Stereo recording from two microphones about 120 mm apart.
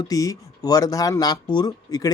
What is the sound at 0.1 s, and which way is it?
Speech, 30° left (ahead or behind).